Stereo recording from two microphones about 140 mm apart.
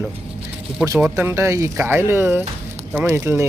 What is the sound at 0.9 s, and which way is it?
Speech, 15° right (ahead or behind).